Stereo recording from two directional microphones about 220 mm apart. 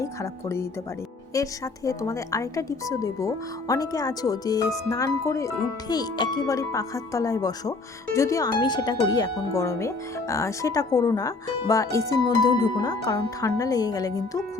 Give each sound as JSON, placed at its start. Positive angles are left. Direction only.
{"t": 0.0, "sound": "speech", "side_deg": 15}